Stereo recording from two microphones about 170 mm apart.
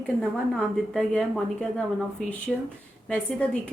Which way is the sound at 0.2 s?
Centre (ahead or behind).